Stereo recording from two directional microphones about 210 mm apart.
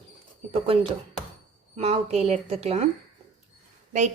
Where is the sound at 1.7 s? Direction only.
30° right (ahead or behind).